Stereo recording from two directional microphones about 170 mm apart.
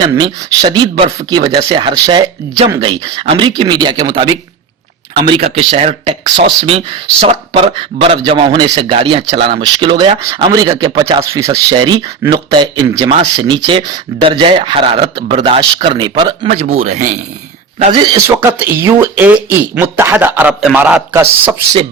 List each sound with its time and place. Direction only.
0.0 s speech: 25° right (ahead or behind)
16.5 s speech: 40° right (ahead or behind)
17.9 s speech: 25° right (ahead or behind)
18.6 s speech: 15° right (ahead or behind)